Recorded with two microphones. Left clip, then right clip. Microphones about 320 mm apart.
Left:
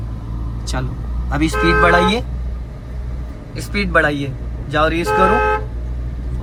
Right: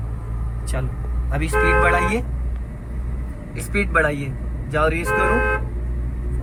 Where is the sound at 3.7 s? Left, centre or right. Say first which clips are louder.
Left 4 dB; centre.